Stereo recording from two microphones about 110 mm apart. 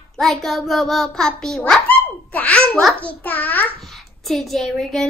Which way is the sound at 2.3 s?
10° left (ahead or behind).